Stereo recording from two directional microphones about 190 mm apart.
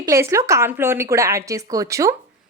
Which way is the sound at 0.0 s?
15° right (ahead or behind).